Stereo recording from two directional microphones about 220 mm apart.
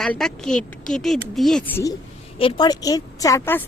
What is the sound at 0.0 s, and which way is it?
A woman's voice, centre (ahead or behind).